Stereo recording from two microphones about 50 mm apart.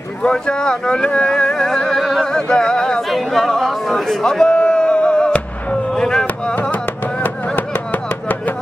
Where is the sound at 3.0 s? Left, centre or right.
Centre.